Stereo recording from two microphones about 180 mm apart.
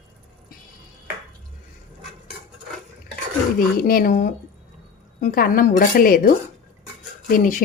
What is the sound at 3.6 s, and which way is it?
A woman's voice, 55° left (ahead or behind).